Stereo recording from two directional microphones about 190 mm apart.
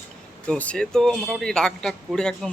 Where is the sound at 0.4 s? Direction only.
5° left (ahead or behind).